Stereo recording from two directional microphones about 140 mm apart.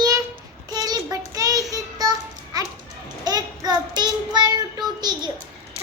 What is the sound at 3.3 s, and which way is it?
Child singing, 30° right (ahead or behind).